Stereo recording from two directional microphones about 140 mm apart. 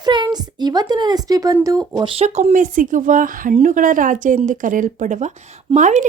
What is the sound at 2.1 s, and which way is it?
Speech, 50° right (ahead or behind).